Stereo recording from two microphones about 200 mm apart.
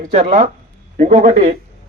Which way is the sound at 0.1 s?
35° right (ahead or behind).